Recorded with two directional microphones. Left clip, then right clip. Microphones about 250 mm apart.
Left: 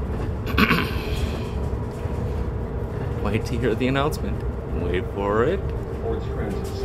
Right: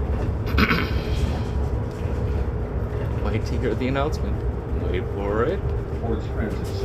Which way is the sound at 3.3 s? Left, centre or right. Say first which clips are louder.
Left 3 dB; centre.